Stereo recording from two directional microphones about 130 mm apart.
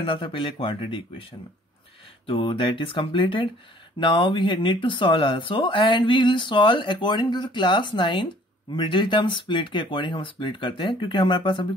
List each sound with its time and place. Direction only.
0.0 s speech: 40° left (ahead or behind)
2.2 s speech: 40° left (ahead or behind)